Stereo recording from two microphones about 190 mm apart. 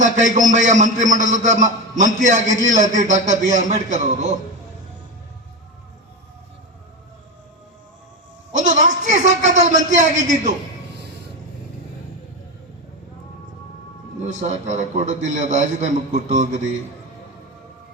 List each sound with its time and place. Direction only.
0.0 s a man's voice: 40° right (ahead or behind)
8.5 s a sound: 40° right (ahead or behind)
14.3 s a man's voice: 40° right (ahead or behind)